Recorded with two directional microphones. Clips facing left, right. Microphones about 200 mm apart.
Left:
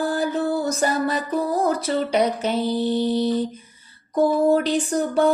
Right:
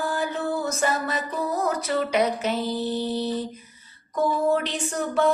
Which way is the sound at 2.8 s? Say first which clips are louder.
Left 5 dB; 30° left (ahead or behind).